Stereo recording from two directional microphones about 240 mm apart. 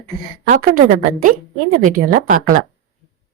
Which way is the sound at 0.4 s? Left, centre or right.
Right.